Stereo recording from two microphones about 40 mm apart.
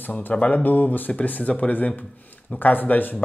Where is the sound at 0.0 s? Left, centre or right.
Left.